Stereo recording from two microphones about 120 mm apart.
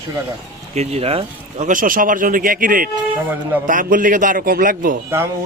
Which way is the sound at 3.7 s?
90° right.